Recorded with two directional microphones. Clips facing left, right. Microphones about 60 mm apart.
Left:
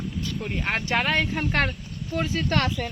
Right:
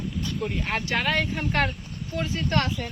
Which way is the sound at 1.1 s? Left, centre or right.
Left.